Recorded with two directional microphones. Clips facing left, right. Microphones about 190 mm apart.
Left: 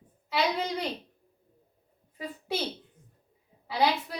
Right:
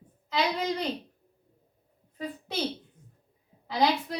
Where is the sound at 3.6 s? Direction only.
5° left (ahead or behind).